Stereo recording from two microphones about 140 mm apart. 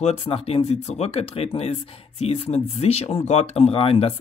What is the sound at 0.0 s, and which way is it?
Speech, 45° left (ahead or behind).